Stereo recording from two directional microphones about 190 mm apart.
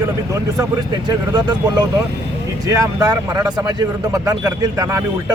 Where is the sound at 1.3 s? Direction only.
20° right (ahead or behind).